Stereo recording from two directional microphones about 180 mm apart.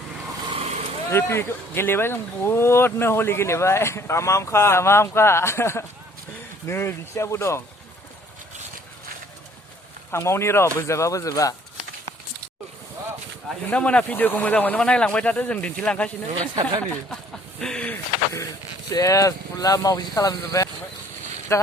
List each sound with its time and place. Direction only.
0.5 s vehicle: 35° right (ahead or behind)
1.1 s speech: 15° left (ahead or behind)
10.1 s speech: 15° left (ahead or behind)
13.7 s speech: 5° left (ahead or behind)
17.6 s speech: 5° left (ahead or behind)